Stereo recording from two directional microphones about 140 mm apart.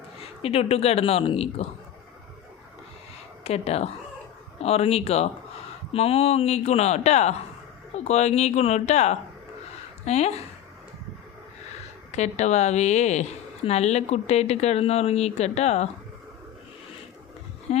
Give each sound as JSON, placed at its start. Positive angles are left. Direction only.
{"t": 0.2, "sound": "speech", "side_deg": 45}
{"t": 3.4, "sound": "speech", "side_deg": 50}
{"t": 12.1, "sound": "speech", "side_deg": 55}
{"t": 17.7, "sound": "speech", "side_deg": 50}